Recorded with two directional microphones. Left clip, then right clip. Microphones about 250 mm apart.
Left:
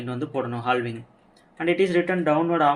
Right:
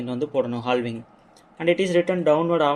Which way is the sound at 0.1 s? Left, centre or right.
Right.